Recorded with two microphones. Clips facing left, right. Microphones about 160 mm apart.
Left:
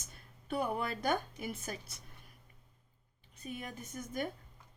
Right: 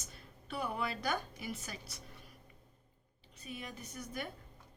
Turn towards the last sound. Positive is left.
turn(degrees=50)  # may be behind; listen again after turning